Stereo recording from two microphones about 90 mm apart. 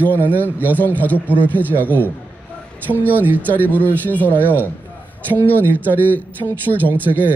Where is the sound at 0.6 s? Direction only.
20° left (ahead or behind).